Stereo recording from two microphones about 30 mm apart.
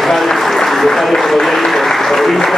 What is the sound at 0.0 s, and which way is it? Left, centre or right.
Applause, centre.